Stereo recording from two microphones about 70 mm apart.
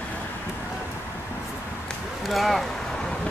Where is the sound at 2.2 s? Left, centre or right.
Centre.